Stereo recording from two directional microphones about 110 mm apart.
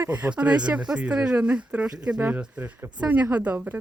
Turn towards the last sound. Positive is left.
turn(degrees=-15)  # may be behind; listen again after turning